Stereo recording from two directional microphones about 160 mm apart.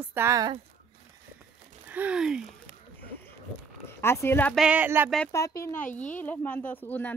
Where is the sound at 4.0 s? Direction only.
15° left (ahead or behind).